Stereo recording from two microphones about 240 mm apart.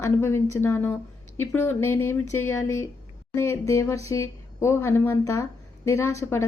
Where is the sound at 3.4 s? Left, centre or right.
Centre.